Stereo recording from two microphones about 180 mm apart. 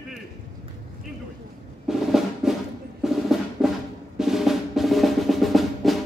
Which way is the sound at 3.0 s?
Centre (ahead or behind).